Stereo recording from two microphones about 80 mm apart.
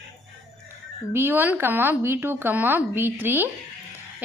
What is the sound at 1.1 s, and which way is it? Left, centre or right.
A woman's voice, right.